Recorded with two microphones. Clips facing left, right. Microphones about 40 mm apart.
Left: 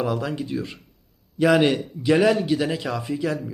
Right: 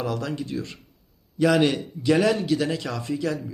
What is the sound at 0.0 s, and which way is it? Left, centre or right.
Speech, centre.